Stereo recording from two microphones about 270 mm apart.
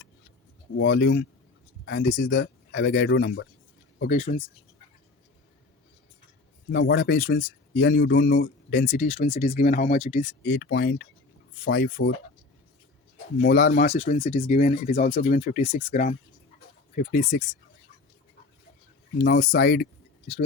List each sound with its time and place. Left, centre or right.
0.8 s speech: left
4.0 s speech: left
6.7 s speech: left
8.9 s speech: left
10.5 s speech: left
13.4 s speech: left
15.9 s speech: left
19.2 s speech: left